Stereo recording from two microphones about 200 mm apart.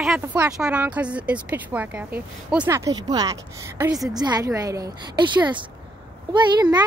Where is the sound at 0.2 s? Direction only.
10° right (ahead or behind).